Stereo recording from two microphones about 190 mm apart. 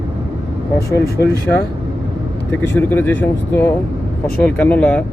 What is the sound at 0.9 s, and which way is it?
Speech, 15° left (ahead or behind).